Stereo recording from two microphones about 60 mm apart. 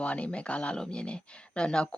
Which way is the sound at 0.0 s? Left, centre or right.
Left.